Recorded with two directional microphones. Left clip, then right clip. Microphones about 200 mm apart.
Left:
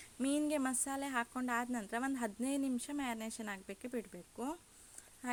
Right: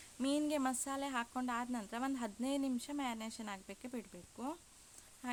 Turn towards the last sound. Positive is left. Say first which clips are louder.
# left 2 dB
turn(degrees=10)  # may be behind; listen again after turning